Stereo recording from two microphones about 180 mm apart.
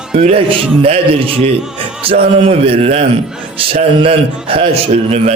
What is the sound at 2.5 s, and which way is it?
A man's voice, 35° right (ahead or behind).